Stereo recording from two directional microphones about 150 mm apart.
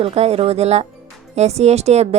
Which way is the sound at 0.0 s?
40° right (ahead or behind).